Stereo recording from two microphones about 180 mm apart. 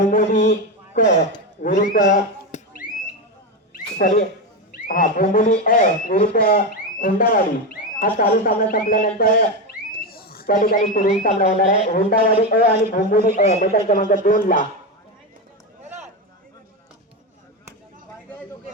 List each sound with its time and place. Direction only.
0.1 s a sound: 45° left (ahead or behind)
0.9 s speech: 45° left (ahead or behind)
3.9 s speech: 45° left (ahead or behind)